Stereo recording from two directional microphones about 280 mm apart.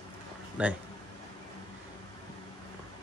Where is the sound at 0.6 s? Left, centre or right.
Centre.